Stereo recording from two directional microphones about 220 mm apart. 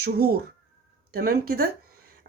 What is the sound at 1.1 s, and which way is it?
Speech, 45° right (ahead or behind).